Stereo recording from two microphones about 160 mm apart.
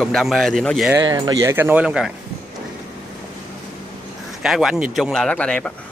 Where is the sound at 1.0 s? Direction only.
25° right (ahead or behind); by 2.1 s 5° right (ahead or behind).